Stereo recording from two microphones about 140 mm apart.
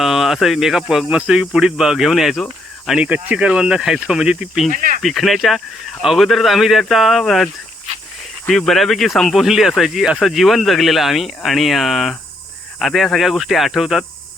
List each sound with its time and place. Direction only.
0.0 s speech: centre (ahead or behind)
4.7 s speech: 75° right (ahead or behind)
5.0 s speech: centre (ahead or behind)